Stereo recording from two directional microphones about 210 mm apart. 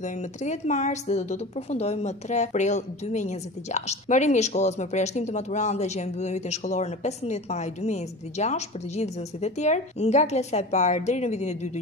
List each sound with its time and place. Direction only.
0.0 s a woman's voice: 35° left (ahead or behind)